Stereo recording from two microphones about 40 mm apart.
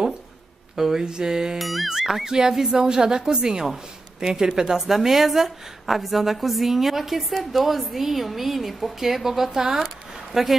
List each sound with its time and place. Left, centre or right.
0.7 s speech: centre
1.6 s a woman's voice: centre
1.9 s a woman's voice: centre